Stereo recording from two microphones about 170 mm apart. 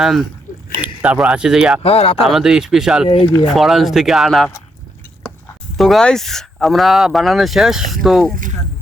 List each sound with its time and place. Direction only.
0.0 s speech: centre (ahead or behind)
1.8 s speech: 35° left (ahead or behind)
2.2 s speech: centre (ahead or behind)
3.1 s speech: 25° left (ahead or behind)
3.5 s speech: centre (ahead or behind)
5.7 s speech: centre (ahead or behind)